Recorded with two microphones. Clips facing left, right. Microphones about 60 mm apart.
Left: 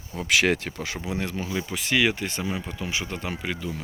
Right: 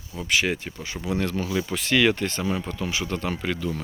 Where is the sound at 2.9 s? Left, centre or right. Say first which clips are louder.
Right 2 dB; left.